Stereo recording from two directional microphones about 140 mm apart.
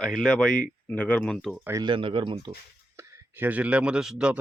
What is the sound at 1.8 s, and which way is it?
Speech, 35° right (ahead or behind).